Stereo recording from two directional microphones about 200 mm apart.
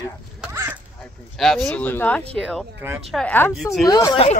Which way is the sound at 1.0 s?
Centre (ahead or behind).